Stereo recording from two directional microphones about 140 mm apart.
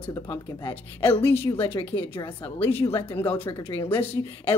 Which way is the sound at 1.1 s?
45° left (ahead or behind).